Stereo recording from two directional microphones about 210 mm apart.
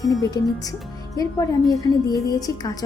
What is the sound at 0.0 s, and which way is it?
Speech, 15° left (ahead or behind).